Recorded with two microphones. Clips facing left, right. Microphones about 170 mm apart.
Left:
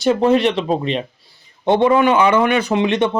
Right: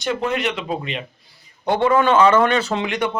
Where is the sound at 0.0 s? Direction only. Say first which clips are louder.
Left 8 dB; 35° left (ahead or behind).